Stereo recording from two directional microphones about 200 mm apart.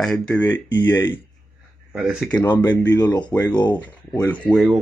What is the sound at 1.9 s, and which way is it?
Speech, 5° right (ahead or behind).